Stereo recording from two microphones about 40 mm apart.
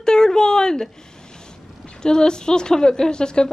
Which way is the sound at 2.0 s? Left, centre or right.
Centre.